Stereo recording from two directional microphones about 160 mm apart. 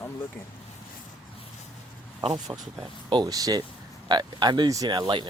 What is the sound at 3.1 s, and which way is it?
Speech, 25° right (ahead or behind).